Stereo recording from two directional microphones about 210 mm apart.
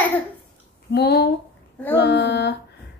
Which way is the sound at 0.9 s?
50° left (ahead or behind).